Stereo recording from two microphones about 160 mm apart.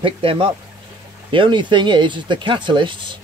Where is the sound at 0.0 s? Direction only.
35° right (ahead or behind).